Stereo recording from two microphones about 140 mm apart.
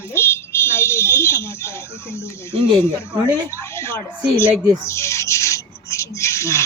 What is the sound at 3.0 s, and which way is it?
Speech, 15° left (ahead or behind).